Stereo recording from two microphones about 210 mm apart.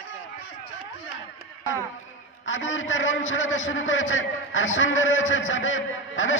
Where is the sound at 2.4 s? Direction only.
65° left (ahead or behind).